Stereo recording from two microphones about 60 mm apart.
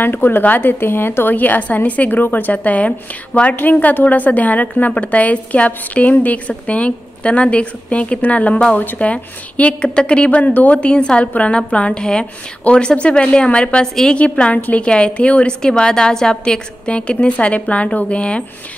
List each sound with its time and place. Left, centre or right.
0.0 s a woman's voice: left; by 18.4 s centre